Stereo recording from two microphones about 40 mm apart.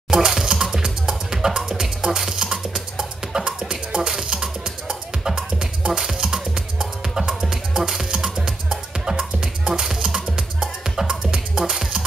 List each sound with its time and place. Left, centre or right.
0.1 s music: centre